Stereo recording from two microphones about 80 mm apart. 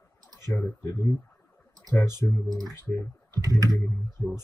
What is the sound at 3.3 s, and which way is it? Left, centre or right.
Speech, right.